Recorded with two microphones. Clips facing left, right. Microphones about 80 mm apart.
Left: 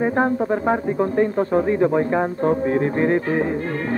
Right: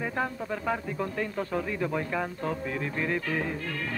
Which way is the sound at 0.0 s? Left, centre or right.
Left.